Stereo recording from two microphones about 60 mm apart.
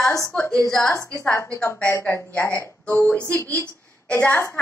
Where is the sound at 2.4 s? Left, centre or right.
Left.